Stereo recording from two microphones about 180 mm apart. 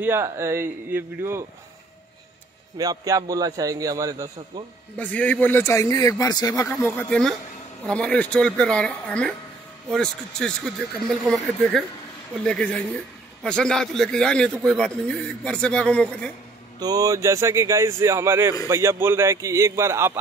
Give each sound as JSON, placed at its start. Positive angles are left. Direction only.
{"t": 0.0, "sound": "speech", "side_deg": -15}
{"t": 2.8, "sound": "a man's voice", "side_deg": -20}
{"t": 4.9, "sound": "speech", "side_deg": 10}
{"t": 12.4, "sound": "speech", "side_deg": 5}
{"t": 16.8, "sound": "speech", "side_deg": -20}